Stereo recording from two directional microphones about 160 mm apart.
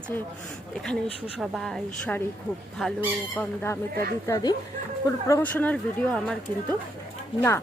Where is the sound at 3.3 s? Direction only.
15° left (ahead or behind).